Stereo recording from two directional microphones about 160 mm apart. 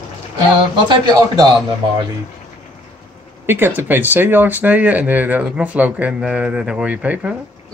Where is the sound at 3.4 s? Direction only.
15° right (ahead or behind).